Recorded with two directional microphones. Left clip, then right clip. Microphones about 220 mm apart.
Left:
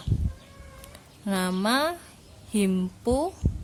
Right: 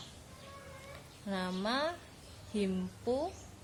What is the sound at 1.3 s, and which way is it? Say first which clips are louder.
A woman's voice: left 10 dB; 35° left (ahead or behind).